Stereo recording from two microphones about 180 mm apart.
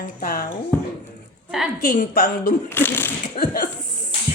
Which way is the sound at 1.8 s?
50° left (ahead or behind).